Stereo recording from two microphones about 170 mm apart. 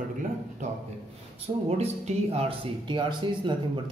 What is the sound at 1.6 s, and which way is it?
Speech, 40° right (ahead or behind).